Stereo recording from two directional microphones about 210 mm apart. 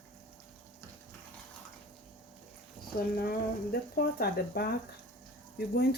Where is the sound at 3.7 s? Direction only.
45° left (ahead or behind).